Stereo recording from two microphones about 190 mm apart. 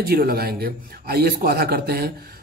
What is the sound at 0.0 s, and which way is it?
Speech, 50° right (ahead or behind).